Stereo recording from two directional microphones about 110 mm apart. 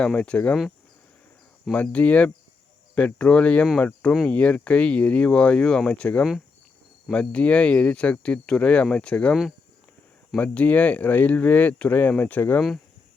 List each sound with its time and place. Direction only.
0.0 s speech: 10° left (ahead or behind)
1.7 s speech: 10° left (ahead or behind)